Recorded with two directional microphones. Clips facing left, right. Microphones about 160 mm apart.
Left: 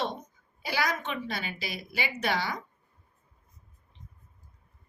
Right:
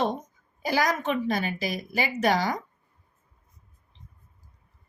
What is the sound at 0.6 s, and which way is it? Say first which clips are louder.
A woman's voice: right 6 dB; 45° right (ahead or behind).